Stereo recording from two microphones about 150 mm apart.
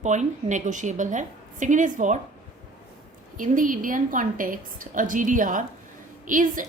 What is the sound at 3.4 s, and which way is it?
A woman's voice, 60° right (ahead or behind).